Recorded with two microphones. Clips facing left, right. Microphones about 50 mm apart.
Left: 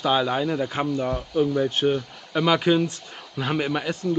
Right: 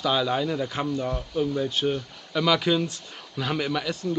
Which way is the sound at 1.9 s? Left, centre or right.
Centre.